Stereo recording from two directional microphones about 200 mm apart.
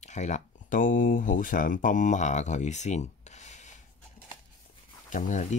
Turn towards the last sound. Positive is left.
turn(degrees=35)  # may be behind; listen again after turning